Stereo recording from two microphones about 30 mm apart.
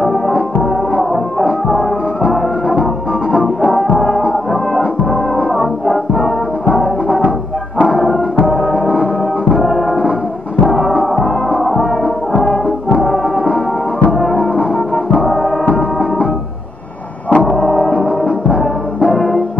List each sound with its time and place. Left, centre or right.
5.6 s music: centre
8.5 s music: centre
10.7 s music: centre
17.3 s a sound: left
17.6 s music: left